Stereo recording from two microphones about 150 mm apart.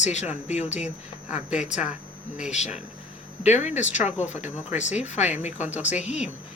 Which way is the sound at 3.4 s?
50° left (ahead or behind).